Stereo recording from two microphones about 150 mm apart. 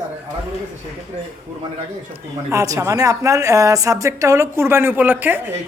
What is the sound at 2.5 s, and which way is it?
A woman's voice, 20° right (ahead or behind).